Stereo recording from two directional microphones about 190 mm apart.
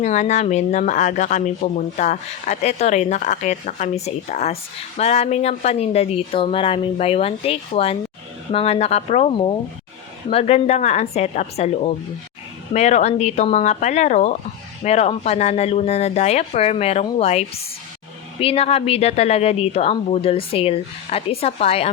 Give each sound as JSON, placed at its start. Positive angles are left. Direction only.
{"t": 0.0, "sound": "speech", "side_deg": 40}